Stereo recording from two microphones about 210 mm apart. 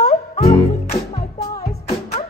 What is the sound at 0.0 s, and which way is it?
Music, 30° left (ahead or behind).